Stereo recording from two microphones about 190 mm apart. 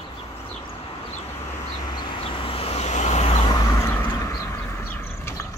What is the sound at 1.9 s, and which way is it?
Vehicle, 25° left (ahead or behind).